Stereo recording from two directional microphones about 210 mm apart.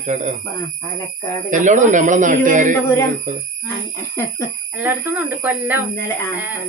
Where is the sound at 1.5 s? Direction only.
35° right (ahead or behind).